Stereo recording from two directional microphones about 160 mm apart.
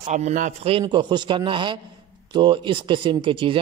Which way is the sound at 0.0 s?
50° right (ahead or behind).